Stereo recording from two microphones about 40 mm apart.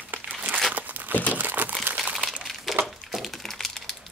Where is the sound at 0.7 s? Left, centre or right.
Right.